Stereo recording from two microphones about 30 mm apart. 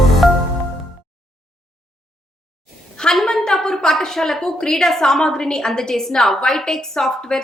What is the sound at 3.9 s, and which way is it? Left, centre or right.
A woman's voice, centre.